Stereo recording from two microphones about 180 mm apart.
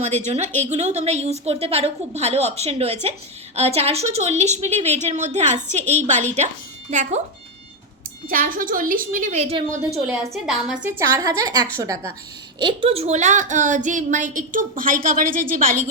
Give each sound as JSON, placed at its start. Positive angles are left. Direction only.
{"t": 0.0, "sound": "a woman's voice", "side_deg": -40}
{"t": 8.3, "sound": "a woman's voice", "side_deg": -50}
{"t": 10.3, "sound": "a woman's voice", "side_deg": -5}
{"t": 10.8, "sound": "a woman's voice", "side_deg": -15}